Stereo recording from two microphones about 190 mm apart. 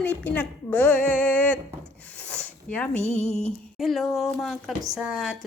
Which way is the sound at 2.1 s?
5° left (ahead or behind).